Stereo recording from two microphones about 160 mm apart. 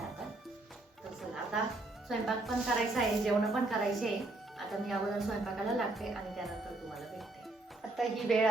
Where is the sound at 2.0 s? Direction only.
Centre (ahead or behind).